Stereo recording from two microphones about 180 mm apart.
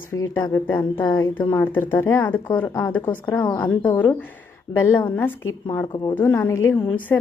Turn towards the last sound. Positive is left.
turn(degrees=10)  # may be behind; listen again after turning